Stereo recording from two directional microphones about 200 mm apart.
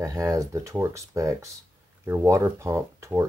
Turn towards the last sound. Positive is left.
turn(degrees=-15)  # may be behind; listen again after turning